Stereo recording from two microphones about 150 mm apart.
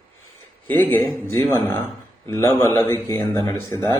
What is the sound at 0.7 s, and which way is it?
A man's voice, 10° left (ahead or behind).